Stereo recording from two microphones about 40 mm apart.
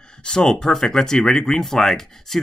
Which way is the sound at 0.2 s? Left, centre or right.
Left.